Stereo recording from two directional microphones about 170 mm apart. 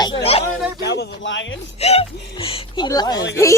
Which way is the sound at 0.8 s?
85° left.